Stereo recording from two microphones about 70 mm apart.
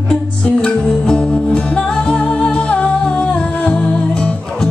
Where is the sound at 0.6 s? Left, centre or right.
Centre.